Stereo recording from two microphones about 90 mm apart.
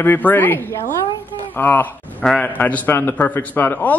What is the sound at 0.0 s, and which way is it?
A man's voice, 20° left (ahead or behind).